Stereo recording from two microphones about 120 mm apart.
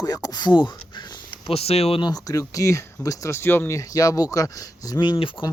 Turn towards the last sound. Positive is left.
turn(degrees=40)  # may be behind; listen again after turning